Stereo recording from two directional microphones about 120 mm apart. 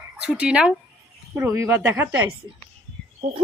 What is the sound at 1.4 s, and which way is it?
Speech, 25° right (ahead or behind).